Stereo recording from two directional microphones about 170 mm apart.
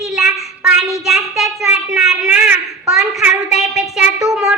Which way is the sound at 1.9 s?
5° right (ahead or behind).